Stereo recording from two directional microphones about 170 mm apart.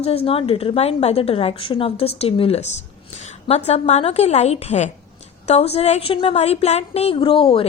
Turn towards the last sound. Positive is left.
turn(degrees=30)  # may be behind; listen again after turning